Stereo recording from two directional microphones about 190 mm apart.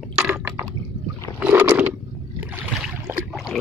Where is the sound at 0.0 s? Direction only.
5° right (ahead or behind).